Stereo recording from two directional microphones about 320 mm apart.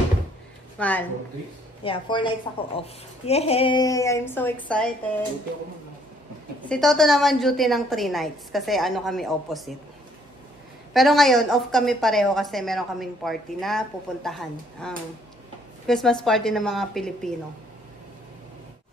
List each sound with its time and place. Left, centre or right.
0.7 s speech: centre
1.9 s a woman's voice: centre
6.7 s a woman's voice: centre
10.9 s a woman's voice: centre